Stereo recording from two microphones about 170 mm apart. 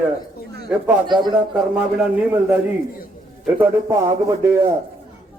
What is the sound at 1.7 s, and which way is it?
A man's voice, 10° right (ahead or behind).